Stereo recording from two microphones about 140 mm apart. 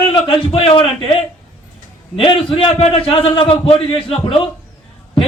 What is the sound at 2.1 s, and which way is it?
A man's voice, 40° left (ahead or behind).